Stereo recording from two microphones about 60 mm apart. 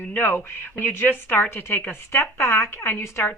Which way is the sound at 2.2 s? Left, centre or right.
Left.